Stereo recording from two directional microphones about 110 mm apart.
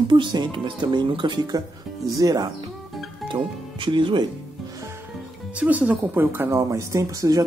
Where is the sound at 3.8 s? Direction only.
50° right (ahead or behind).